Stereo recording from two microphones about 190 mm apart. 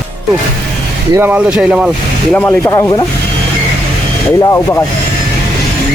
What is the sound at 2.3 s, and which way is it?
Speech, 10° left (ahead or behind).